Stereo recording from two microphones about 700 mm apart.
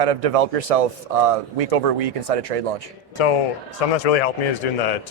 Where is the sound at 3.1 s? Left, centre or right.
Left.